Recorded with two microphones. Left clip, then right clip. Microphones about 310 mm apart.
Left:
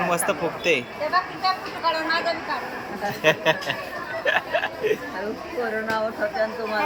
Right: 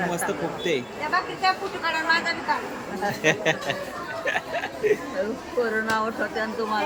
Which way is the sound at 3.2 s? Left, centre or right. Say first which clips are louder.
Left 3 dB; centre.